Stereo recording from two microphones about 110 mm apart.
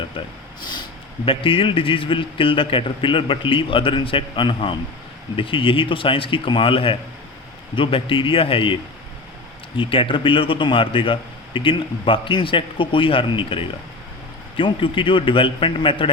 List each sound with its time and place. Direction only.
0.6 s a man's voice: 40° left (ahead or behind)